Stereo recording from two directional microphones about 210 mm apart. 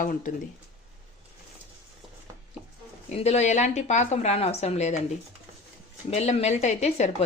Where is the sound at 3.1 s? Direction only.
30° left (ahead or behind).